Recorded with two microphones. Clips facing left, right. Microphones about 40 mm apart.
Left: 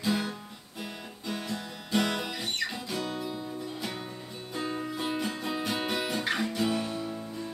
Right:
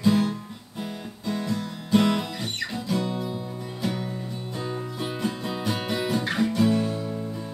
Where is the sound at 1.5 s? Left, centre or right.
Centre.